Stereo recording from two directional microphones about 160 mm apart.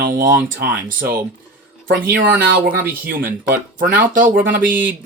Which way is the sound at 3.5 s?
65° right (ahead or behind).